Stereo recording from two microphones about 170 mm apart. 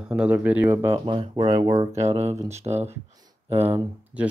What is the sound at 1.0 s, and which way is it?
Speech, 30° right (ahead or behind).